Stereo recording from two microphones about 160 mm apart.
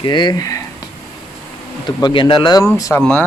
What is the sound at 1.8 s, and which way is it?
Speech, 30° left (ahead or behind).